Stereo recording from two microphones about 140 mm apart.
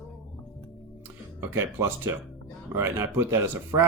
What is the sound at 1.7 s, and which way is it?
Speech, 20° right (ahead or behind).